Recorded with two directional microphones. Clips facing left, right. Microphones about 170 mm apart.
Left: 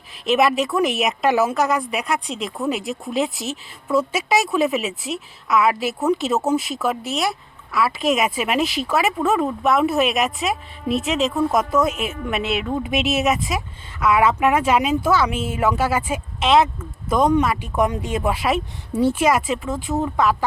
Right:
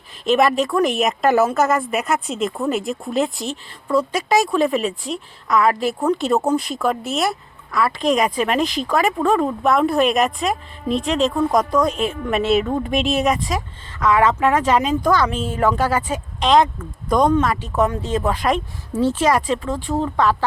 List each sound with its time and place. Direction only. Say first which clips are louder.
0.3 s speech: right 1 dB; centre (ahead or behind)
12.3 s speech: right 7 dB; 40° right (ahead or behind)
12.9 s speech: even; 5° left (ahead or behind)